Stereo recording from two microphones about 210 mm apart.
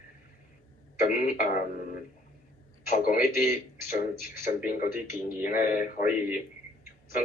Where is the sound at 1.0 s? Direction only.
45° left (ahead or behind).